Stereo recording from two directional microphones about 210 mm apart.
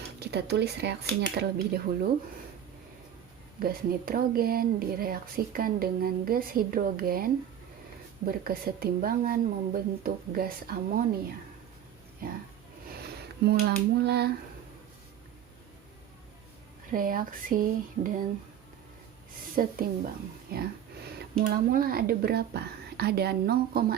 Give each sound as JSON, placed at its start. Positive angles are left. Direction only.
{"t": 0.2, "sound": "speech", "side_deg": -50}
{"t": 3.6, "sound": "speech", "side_deg": -45}
{"t": 8.3, "sound": "speech", "side_deg": -45}
{"t": 13.0, "sound": "speech", "side_deg": -50}
{"t": 16.9, "sound": "a sound", "side_deg": -40}
{"t": 19.6, "sound": "a sound", "side_deg": -40}
{"t": 20.5, "sound": "speech", "side_deg": -50}